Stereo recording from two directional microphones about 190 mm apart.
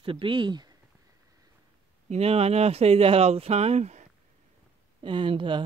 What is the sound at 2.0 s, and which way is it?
Speech, 35° right (ahead or behind).